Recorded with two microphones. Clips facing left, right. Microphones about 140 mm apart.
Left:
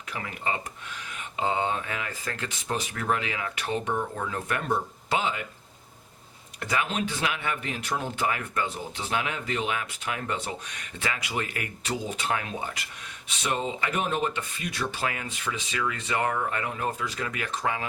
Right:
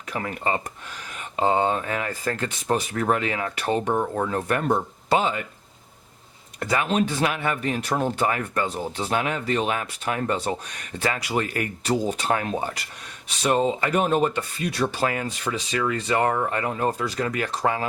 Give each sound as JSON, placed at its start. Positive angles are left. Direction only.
{"t": 0.1, "sound": "speech", "side_deg": -45}
{"t": 6.6, "sound": "speech", "side_deg": -45}